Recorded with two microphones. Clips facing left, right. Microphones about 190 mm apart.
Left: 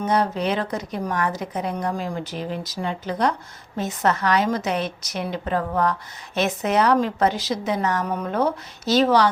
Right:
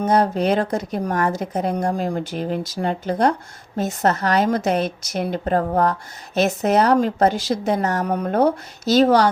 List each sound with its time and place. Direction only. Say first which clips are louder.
0.0 s a woman's voice: right 4 dB; 45° right (ahead or behind)
2.0 s a woman's voice: right 5 dB; 50° right (ahead or behind)